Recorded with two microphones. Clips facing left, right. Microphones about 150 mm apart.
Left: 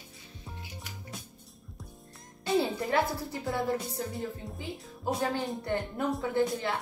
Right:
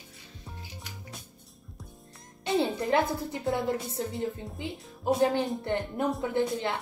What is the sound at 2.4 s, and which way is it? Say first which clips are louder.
A woman's voice: right 1 dB; 20° right (ahead or behind).